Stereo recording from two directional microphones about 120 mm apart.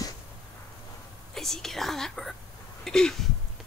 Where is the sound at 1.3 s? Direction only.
5° left (ahead or behind).